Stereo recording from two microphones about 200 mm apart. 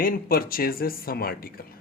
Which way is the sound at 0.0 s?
45° left (ahead or behind).